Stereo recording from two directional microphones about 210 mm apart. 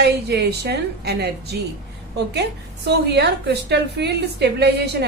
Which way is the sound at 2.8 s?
50° right (ahead or behind).